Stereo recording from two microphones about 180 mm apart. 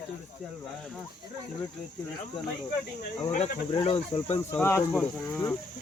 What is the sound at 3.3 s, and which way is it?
Cricket, 35° left (ahead or behind).